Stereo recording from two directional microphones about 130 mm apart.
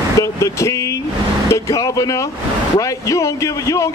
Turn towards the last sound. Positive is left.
turn(degrees=25)  # may be behind; listen again after turning